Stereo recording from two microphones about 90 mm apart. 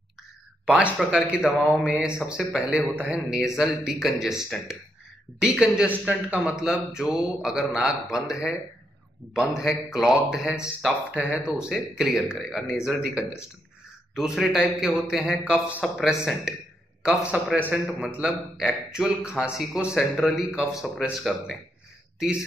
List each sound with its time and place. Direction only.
1.0 s speech: centre (ahead or behind)
1.3 s a man's voice: 10° right (ahead or behind)
18.6 s a man's voice: 5° right (ahead or behind)